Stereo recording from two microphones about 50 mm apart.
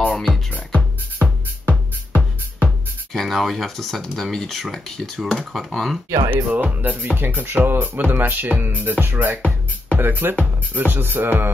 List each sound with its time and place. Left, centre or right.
1.2 s music: right
3.1 s speech: centre
6.0 s speech: right
6.5 s speech: right
10.7 s music: right